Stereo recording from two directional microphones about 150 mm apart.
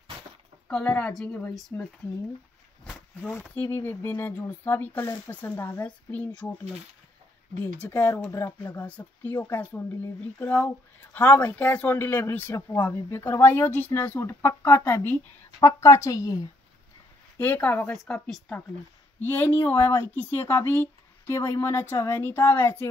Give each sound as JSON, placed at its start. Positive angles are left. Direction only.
{"t": 0.7, "sound": "speech", "side_deg": 5}
{"t": 2.8, "sound": "a sound", "side_deg": 5}
{"t": 3.3, "sound": "speech", "side_deg": 15}
{"t": 7.6, "sound": "speech", "side_deg": 10}
{"t": 17.4, "sound": "speech", "side_deg": 10}